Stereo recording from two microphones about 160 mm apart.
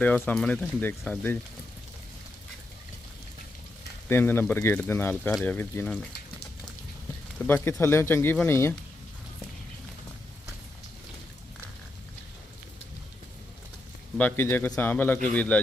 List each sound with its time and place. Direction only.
0.0 s a man's voice: 10° left (ahead or behind)
4.1 s a man's voice: 15° left (ahead or behind)
5.3 s a man's voice: centre (ahead or behind)
7.4 s a man's voice: 15° left (ahead or behind)
14.2 s a man's voice: 10° left (ahead or behind)